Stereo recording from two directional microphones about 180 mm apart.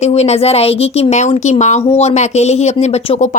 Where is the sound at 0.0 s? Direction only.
35° left (ahead or behind).